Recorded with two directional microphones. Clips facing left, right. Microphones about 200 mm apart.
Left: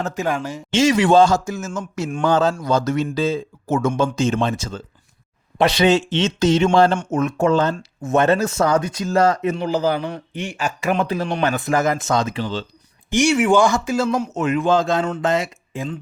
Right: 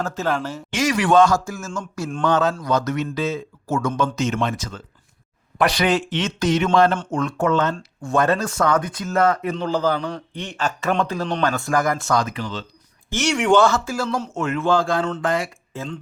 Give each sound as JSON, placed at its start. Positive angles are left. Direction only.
{"t": 0.0, "sound": "a man's voice", "side_deg": 15}
{"t": 0.7, "sound": "speech", "side_deg": 25}
{"t": 9.6, "sound": "a man's voice", "side_deg": 10}
{"t": 13.1, "sound": "a man's voice", "side_deg": 10}